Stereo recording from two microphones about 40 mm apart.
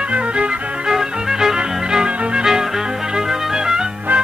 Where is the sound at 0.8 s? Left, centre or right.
Centre.